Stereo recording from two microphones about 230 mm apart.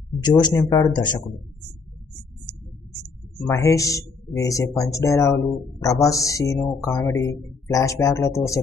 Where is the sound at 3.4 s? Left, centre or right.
Centre.